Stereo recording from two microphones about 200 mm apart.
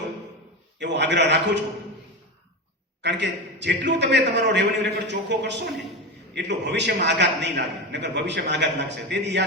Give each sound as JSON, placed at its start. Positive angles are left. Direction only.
{"t": 0.8, "sound": "a man's voice", "side_deg": -60}
{"t": 3.0, "sound": "a man's voice", "side_deg": -60}